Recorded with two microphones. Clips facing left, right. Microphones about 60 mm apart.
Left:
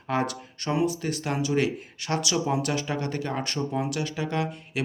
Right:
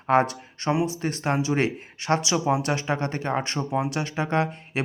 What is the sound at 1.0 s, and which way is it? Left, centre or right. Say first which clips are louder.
Speech: right 3 dB; right.